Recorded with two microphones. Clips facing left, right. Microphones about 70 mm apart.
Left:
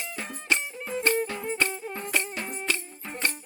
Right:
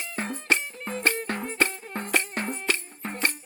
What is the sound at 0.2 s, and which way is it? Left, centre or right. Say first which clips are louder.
Music: right 3 dB; right.